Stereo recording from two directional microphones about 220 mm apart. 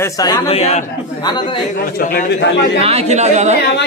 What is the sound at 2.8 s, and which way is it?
Speech, 30° right (ahead or behind).